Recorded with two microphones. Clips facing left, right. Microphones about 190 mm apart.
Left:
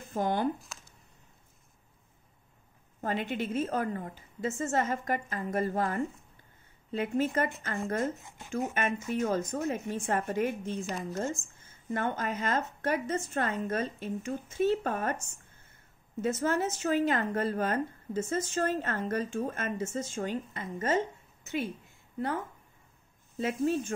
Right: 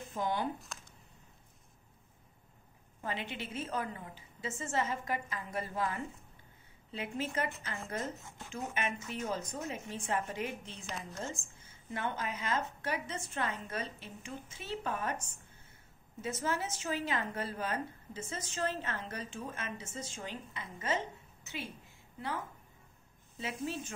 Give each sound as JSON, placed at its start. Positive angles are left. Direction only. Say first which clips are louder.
{"t": 0.1, "sound": "speech", "louder": "left 6 dB", "side_deg": 50}
{"t": 0.7, "sound": "a sound", "louder": "even", "side_deg": 5}
{"t": 3.0, "sound": "a woman's voice", "louder": "left 8 dB", "side_deg": 45}
{"t": 16.2, "sound": "a woman's voice", "louder": "left 7 dB", "side_deg": 50}
{"t": 23.3, "sound": "a woman's voice", "louder": "left 10 dB", "side_deg": 50}